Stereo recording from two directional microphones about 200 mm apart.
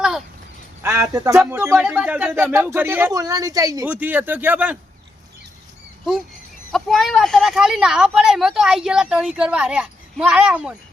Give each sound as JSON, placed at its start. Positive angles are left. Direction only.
{"t": 0.8, "sound": "speech", "side_deg": -10}
{"t": 6.7, "sound": "a woman's voice", "side_deg": 0}